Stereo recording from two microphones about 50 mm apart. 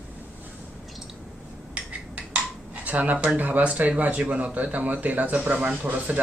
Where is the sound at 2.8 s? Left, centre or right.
Right.